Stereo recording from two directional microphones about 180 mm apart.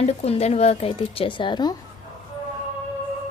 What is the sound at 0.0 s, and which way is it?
A woman's voice, 35° left (ahead or behind).